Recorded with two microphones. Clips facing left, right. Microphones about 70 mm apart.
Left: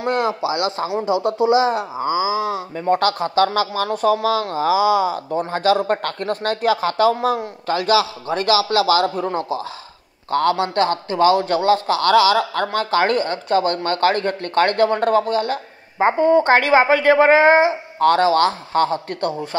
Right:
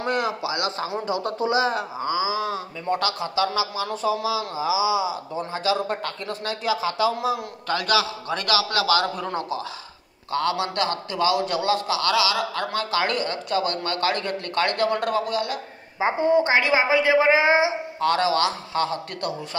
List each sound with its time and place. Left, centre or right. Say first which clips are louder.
0.0 s speech: left 5 dB; left
2.8 s speech: left 8 dB; left
7.6 s a man's voice: left 5 dB; left
16.0 s speech: left 5 dB; left